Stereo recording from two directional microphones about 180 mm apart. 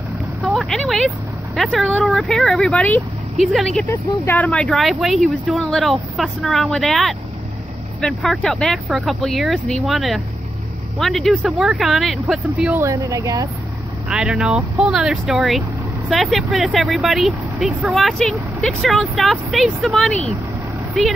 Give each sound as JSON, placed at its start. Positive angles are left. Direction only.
{"t": 0.4, "sound": "speech", "side_deg": 0}
{"t": 4.1, "sound": "speech", "side_deg": 15}
{"t": 12.8, "sound": "speech", "side_deg": -15}
{"t": 14.0, "sound": "speech", "side_deg": -5}